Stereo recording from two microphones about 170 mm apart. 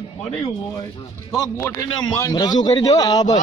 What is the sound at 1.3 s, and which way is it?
A man's voice, 20° left (ahead or behind).